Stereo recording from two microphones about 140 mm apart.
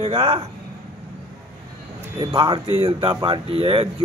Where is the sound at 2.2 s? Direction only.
35° right (ahead or behind).